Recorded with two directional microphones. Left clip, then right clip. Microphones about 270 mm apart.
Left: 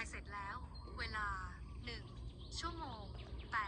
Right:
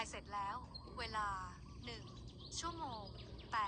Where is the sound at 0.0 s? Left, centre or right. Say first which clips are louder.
Right 3 dB; centre.